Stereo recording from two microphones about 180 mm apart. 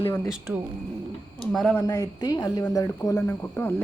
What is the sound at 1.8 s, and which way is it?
A woman's voice, 20° left (ahead or behind).